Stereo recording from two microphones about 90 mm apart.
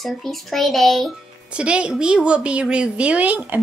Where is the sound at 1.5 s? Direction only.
10° right (ahead or behind).